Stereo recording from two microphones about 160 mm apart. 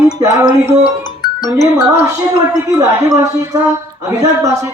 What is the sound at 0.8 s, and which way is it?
Music, 25° left (ahead or behind).